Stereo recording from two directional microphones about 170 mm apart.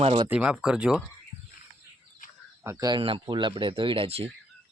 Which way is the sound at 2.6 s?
20° right (ahead or behind).